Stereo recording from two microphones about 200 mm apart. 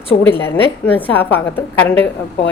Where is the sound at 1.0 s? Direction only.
10° left (ahead or behind).